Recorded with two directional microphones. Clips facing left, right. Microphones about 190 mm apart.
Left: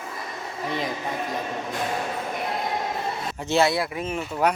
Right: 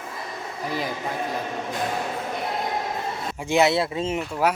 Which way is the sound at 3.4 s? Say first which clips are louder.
Right 2 dB; 20° right (ahead or behind).